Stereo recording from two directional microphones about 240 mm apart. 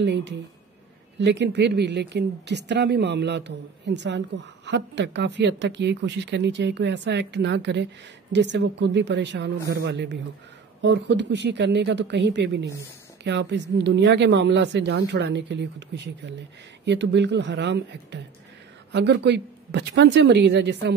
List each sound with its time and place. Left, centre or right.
0.0 s speech: right